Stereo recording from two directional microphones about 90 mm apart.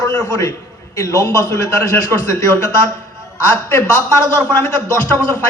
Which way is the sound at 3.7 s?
20° left (ahead or behind).